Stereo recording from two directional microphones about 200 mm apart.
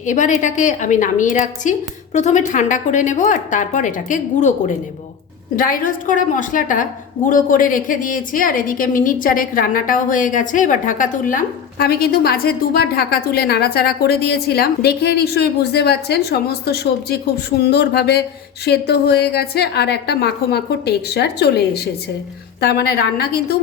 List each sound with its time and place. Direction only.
0.0 s speech: 40° left (ahead or behind)
5.5 s a woman's voice: 45° left (ahead or behind)
17.6 s a sound: 55° left (ahead or behind)
22.6 s a woman's voice: 55° left (ahead or behind)